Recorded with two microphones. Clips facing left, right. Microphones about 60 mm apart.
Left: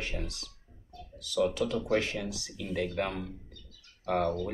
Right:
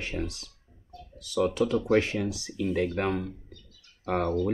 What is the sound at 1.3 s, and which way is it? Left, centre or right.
Speech, right.